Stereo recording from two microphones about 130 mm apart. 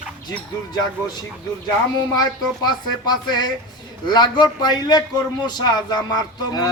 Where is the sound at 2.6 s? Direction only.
35° left (ahead or behind).